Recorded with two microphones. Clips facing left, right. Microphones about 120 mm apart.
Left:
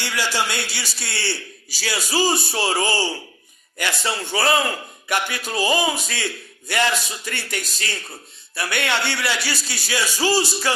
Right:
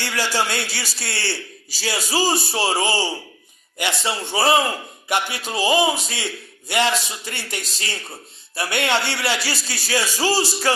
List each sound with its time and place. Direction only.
0.0 s a man's voice: 40° right (ahead or behind)